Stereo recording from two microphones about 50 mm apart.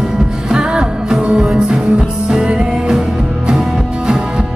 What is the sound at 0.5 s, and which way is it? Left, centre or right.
Music, centre.